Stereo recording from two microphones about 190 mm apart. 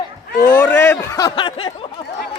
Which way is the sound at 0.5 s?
10° left (ahead or behind).